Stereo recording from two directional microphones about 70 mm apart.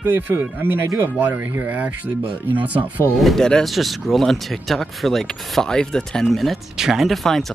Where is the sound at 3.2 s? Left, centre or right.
Centre.